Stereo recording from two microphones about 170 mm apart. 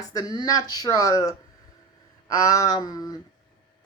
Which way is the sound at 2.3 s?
20° left (ahead or behind).